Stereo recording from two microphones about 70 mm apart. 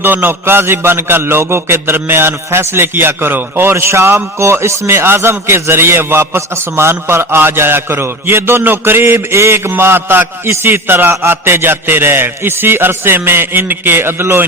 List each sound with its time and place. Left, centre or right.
0.0 s a man's voice: right